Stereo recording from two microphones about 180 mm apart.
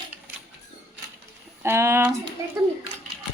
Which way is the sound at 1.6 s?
15° right (ahead or behind).